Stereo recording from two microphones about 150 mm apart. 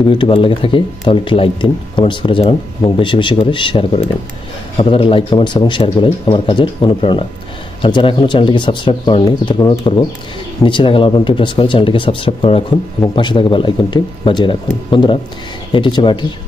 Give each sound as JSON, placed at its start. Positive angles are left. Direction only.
{"t": 0.0, "sound": "speech", "side_deg": 35}